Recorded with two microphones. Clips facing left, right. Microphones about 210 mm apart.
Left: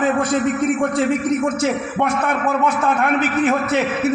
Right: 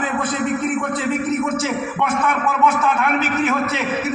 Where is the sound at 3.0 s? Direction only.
50° left (ahead or behind).